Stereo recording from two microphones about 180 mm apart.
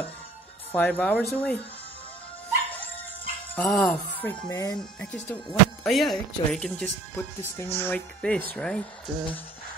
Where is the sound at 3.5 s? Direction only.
5° left (ahead or behind).